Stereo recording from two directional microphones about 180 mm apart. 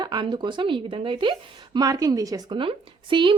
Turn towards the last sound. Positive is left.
turn(degrees=-30)  # may be behind; listen again after turning